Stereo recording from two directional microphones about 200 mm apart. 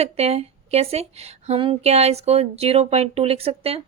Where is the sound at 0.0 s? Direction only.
30° right (ahead or behind).